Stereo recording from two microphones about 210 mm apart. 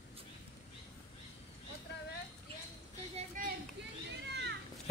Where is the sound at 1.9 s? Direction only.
55° left (ahead or behind).